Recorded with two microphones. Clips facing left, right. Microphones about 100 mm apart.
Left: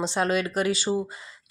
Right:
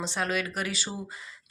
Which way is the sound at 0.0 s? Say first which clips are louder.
Left 5 dB; 25° left (ahead or behind).